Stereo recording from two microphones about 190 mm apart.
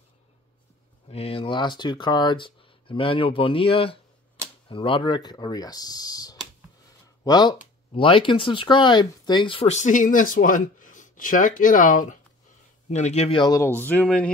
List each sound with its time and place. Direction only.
1.0 s speech: 30° left (ahead or behind)
13.7 s speech: 10° left (ahead or behind)